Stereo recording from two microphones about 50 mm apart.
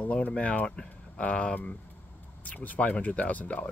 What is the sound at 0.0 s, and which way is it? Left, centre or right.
Speech, left.